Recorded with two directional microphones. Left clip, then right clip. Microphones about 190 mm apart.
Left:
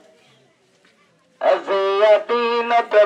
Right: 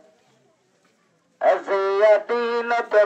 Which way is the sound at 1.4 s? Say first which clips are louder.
Left 2 dB; 20° left (ahead or behind).